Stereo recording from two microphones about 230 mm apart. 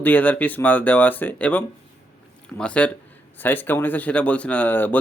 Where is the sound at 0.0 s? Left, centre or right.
Centre.